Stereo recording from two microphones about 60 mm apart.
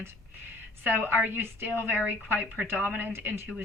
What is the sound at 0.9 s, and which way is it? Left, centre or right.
A woman's voice, right.